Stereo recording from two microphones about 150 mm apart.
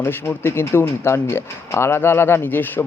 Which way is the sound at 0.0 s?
15° left (ahead or behind).